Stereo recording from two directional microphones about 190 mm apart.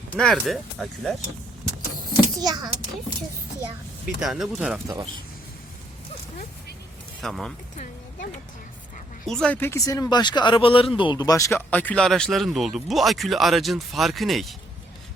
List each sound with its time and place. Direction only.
0.1 s speech: 5° left (ahead or behind)
2.4 s a child's voice: 20° right (ahead or behind)
4.0 s speech: 5° right (ahead or behind)
7.2 s speech: centre (ahead or behind)
9.2 s speech: 5° left (ahead or behind)